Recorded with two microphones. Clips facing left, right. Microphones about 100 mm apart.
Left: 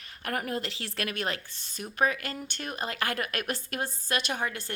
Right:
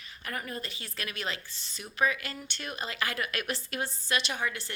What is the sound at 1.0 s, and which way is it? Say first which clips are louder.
A woman's voice: left 3 dB; 55° left (ahead or behind).